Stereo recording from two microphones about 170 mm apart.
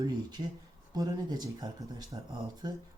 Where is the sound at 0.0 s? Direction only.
25° right (ahead or behind).